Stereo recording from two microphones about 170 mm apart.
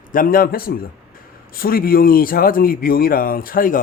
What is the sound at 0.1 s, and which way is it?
Speech, 55° left (ahead or behind).